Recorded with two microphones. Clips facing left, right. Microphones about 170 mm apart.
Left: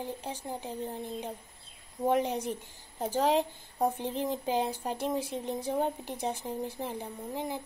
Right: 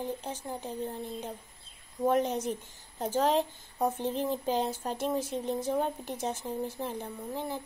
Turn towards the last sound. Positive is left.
turn(degrees=15)  # may be behind; listen again after turning